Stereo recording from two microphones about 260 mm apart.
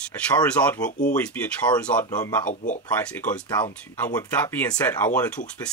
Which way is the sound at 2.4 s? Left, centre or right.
Left.